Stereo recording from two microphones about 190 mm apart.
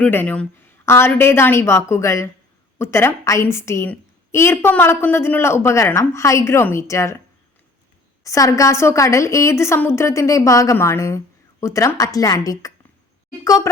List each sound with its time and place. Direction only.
0.0 s a woman's voice: 10° left (ahead or behind)
8.2 s a woman's voice: 15° left (ahead or behind)